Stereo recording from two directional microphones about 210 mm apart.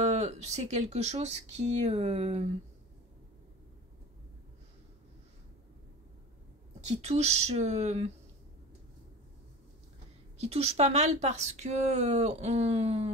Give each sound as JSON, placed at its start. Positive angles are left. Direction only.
{"t": 0.0, "sound": "speech", "side_deg": -30}
{"t": 7.0, "sound": "speech", "side_deg": -30}
{"t": 10.4, "sound": "speech", "side_deg": -30}